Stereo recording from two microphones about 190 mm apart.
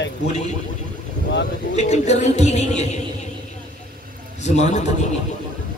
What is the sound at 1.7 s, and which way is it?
Speech, 35° left (ahead or behind).